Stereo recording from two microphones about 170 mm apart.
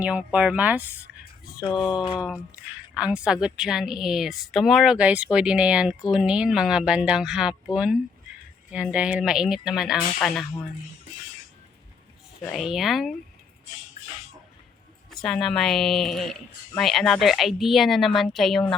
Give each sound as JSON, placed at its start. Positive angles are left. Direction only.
{"t": 0.0, "sound": "speech", "side_deg": -5}
{"t": 1.6, "sound": "speech", "side_deg": 25}
{"t": 2.1, "sound": "speech", "side_deg": -5}
{"t": 12.5, "sound": "speech", "side_deg": 0}
{"t": 15.2, "sound": "speech", "side_deg": 0}